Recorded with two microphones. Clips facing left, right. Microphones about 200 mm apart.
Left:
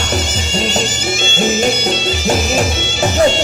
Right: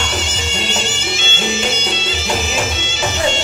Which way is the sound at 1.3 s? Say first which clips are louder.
Left 6 dB; 45° left (ahead or behind).